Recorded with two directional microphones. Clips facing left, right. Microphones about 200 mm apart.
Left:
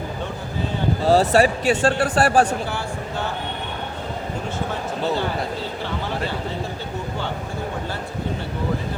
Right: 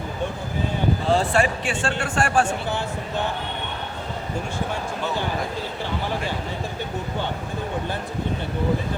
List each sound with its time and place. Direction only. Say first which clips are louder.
1.0 s speech: left 6 dB; 40° left (ahead or behind)